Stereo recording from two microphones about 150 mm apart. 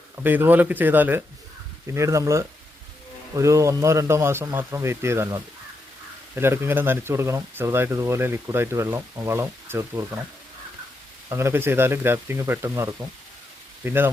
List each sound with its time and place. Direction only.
0.2 s a man's voice: 15° right (ahead or behind)
11.3 s speech: 15° right (ahead or behind)